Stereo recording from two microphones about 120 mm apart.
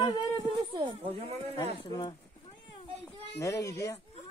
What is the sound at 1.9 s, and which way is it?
Speech, 40° left (ahead or behind).